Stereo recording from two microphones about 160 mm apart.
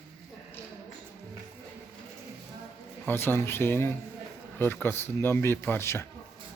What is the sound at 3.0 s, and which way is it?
Speech, 15° left (ahead or behind).